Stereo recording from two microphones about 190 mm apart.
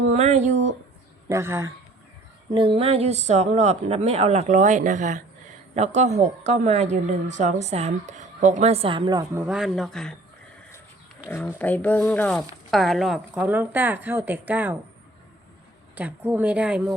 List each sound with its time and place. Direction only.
0.1 s speech: 35° right (ahead or behind)
1.3 s a woman's voice: 15° right (ahead or behind)
2.5 s a woman's voice: 25° right (ahead or behind); by 10.2 s 5° left (ahead or behind)
11.3 s a woman's voice: 10° left (ahead or behind); by 14.8 s 10° right (ahead or behind)
16.0 s a woman's voice: 10° right (ahead or behind)